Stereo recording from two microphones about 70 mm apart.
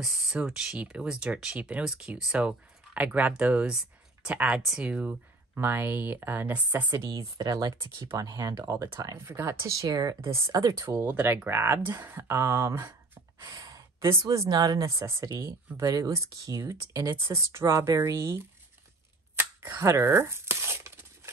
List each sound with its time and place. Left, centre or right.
0.0 s speech: centre
5.6 s speech: right
7.2 s speech: right
7.5 s speech: right
8.6 s speech: right
9.7 s speech: right
10.2 s speech: right
11.0 s speech: right
13.4 s sigh: right
14.5 s speech: right
15.0 s speech: right
16.7 s speech: right
19.3 s a sound: right